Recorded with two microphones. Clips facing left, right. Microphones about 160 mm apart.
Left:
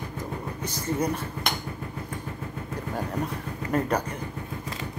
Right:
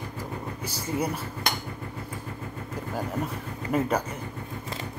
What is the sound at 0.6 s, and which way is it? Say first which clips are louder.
Dishes: left 2 dB; 10° right (ahead or behind).